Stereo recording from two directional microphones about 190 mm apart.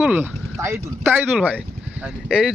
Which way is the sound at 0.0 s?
10° right (ahead or behind).